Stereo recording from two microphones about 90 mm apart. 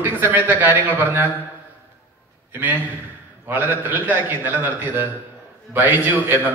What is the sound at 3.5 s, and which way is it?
A man's voice, 20° right (ahead or behind).